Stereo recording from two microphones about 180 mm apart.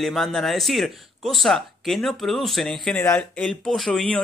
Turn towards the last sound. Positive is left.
turn(degrees=5)  # may be behind; listen again after turning